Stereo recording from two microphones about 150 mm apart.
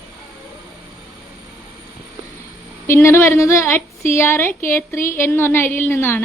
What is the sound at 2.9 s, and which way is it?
A woman's voice, 15° left (ahead or behind).